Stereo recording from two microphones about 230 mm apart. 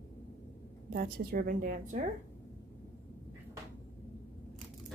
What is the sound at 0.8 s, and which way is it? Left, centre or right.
A woman's voice, right.